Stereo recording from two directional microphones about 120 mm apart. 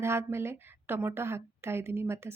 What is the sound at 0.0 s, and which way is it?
A woman's voice, 20° right (ahead or behind).